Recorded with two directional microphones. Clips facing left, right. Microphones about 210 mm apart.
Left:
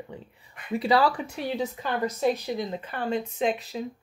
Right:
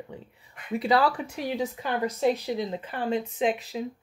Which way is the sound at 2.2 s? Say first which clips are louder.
Right 2 dB; 25° right (ahead or behind).